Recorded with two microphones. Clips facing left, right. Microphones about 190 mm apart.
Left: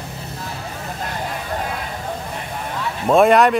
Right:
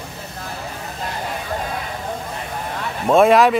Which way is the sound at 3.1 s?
Centre (ahead or behind).